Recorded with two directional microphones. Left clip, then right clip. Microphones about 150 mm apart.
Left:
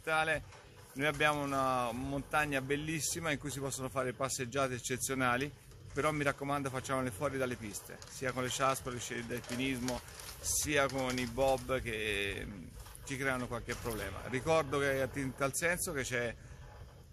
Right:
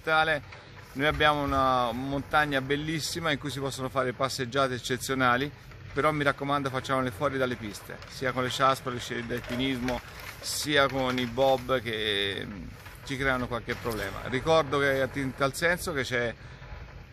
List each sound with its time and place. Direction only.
0.0 s speech: 5° right (ahead or behind)
10.4 s speech: 5° right (ahead or behind)